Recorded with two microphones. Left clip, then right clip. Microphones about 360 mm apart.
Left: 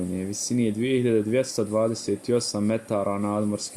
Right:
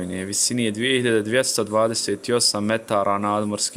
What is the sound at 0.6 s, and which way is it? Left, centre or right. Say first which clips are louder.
Speech: right 2 dB; right.